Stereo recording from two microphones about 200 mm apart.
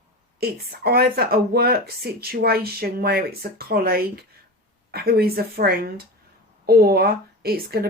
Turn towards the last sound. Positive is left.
turn(degrees=-50)  # may be behind; listen again after turning